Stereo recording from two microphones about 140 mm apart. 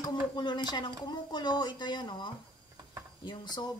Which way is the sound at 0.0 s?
30° left (ahead or behind).